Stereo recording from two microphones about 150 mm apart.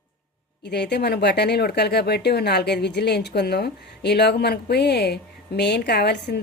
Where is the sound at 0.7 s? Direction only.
90° left.